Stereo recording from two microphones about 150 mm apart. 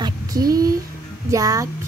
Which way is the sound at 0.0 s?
25° right (ahead or behind).